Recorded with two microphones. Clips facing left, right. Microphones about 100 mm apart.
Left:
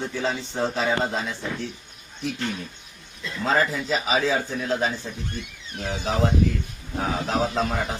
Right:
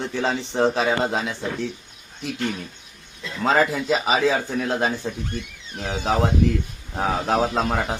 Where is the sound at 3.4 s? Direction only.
80° right.